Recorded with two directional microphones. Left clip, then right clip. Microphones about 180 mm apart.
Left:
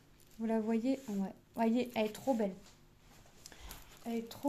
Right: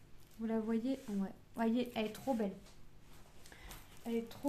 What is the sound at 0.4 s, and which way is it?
Speech, 30° left (ahead or behind).